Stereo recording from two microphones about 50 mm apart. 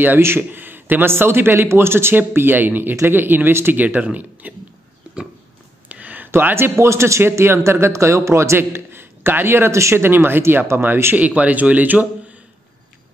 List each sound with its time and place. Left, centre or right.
0.4 s a man's voice: right
2.1 s speech: right
3.8 s speech: right
5.9 s a sound: right
6.3 s a man's voice: right
8.5 s a man's voice: right
9.8 s a man's voice: right
10.0 s speech: right
11.1 s speech: right